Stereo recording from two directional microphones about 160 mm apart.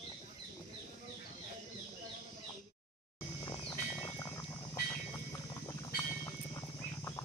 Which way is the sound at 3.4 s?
30° left (ahead or behind).